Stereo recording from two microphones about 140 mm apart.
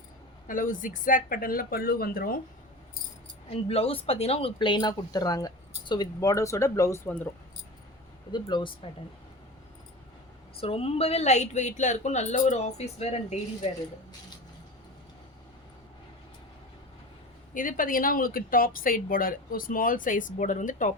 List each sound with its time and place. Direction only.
0.4 s speech: 70° left (ahead or behind); by 2.4 s 90° left
3.5 s a woman's voice: 45° left (ahead or behind)
4.5 s speech: 30° left (ahead or behind); by 7.3 s 15° left (ahead or behind)
8.3 s speech: 30° left (ahead or behind)
10.6 s a woman's voice: 45° left (ahead or behind)
17.5 s speech: 75° left (ahead or behind)